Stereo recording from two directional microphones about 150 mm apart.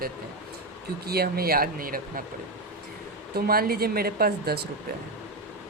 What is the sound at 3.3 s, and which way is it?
Speech, 90° right.